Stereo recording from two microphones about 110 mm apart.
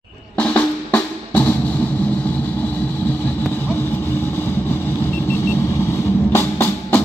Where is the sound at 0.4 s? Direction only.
10° left (ahead or behind).